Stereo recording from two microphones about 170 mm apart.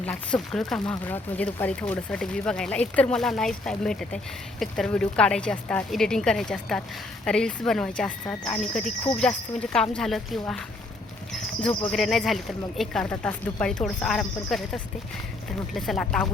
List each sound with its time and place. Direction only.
0.0 s speech: 5° left (ahead or behind)
11.9 s speech: centre (ahead or behind)